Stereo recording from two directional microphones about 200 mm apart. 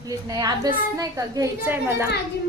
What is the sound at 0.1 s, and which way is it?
A woman's voice, 20° right (ahead or behind).